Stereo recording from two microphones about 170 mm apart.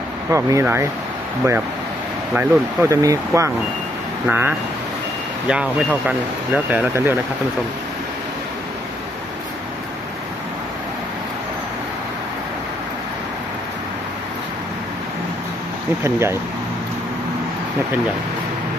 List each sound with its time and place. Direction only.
0.3 s speech: 15° right (ahead or behind)
2.3 s speech: 15° right (ahead or behind)
16.0 s speech: 15° right (ahead or behind)